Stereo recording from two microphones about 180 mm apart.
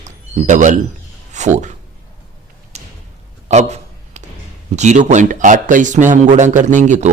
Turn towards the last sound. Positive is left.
turn(degrees=-45)  # may be behind; listen again after turning